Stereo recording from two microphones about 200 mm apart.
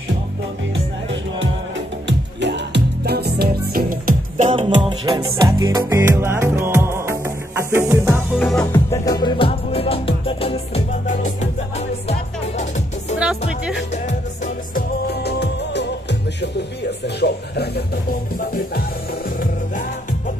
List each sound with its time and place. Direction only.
2.0 s music: 60° right (ahead or behind)
4.4 s music: 35° right (ahead or behind)
4.6 s music: 25° right (ahead or behind)
8.4 s music: 5° left (ahead or behind)
8.9 s music: 20° left (ahead or behind); by 12.8 s 35° left (ahead or behind)
13.9 s music: 35° left (ahead or behind)
15.1 s music: 55° left (ahead or behind)
17.0 s speech: 55° left (ahead or behind)
18.4 s music: 45° left (ahead or behind)